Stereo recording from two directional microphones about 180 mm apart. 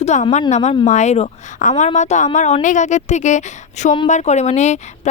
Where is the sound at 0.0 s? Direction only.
40° left (ahead or behind).